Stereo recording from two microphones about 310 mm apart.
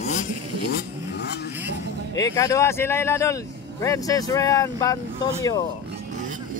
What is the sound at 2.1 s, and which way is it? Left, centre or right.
Speech, centre.